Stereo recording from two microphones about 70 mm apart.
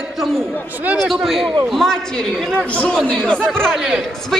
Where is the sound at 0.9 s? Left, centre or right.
Centre.